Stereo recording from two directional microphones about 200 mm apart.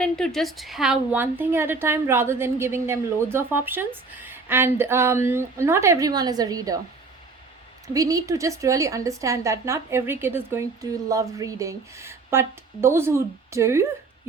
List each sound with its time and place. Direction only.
0.0 s a woman's voice: centre (ahead or behind); by 6.7 s 20° right (ahead or behind)
7.9 s a woman's voice: 15° right (ahead or behind)